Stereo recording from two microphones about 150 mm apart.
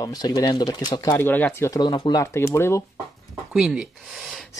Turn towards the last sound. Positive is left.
turn(degrees=-5)  # may be behind; listen again after turning